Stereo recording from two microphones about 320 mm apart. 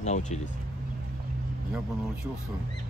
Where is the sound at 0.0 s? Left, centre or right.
Left.